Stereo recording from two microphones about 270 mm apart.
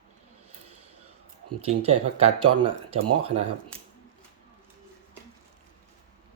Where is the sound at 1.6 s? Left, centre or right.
Right.